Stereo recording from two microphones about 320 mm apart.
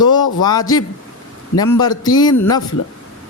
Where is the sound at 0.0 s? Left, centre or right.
Centre.